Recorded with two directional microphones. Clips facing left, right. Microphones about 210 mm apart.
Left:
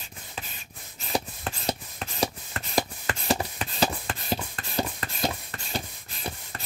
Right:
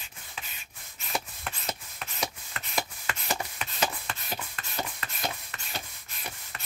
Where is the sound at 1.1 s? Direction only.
35° left (ahead or behind).